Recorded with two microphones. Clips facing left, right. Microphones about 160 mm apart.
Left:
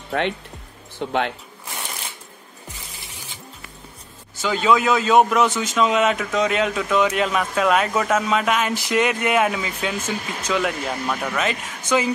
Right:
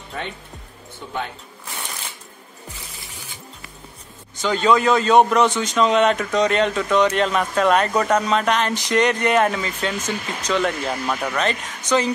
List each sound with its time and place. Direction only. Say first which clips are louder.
0.1 s speech: left 8 dB; 60° left (ahead or behind)
0.9 s speech: left 6 dB; 75° left (ahead or behind)
4.4 s a man's voice: right 1 dB; 5° left (ahead or behind)